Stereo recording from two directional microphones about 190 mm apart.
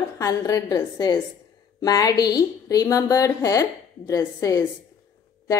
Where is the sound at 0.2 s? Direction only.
20° left (ahead or behind).